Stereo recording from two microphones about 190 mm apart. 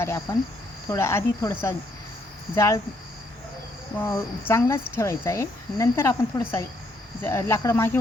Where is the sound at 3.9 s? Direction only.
10° left (ahead or behind).